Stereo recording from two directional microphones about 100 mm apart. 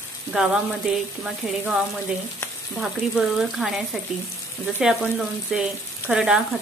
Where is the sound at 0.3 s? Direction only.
5° right (ahead or behind).